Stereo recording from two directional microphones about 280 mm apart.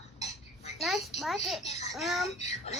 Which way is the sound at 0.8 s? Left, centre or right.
Centre.